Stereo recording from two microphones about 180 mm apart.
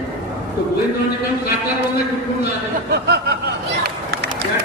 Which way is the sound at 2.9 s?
65° right (ahead or behind).